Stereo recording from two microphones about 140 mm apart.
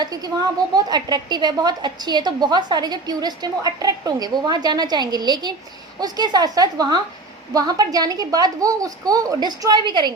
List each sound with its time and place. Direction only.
0.0 s a woman's voice: 25° right (ahead or behind)